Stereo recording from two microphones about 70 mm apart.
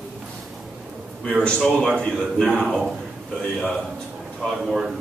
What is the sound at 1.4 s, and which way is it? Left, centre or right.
A man's voice, centre.